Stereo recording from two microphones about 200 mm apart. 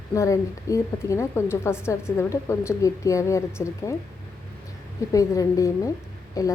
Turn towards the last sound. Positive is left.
turn(degrees=15)  # may be behind; listen again after turning